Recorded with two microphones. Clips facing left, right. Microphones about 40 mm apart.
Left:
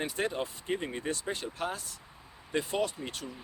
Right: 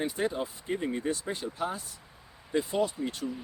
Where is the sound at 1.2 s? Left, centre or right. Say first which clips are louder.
Right 2 dB; left.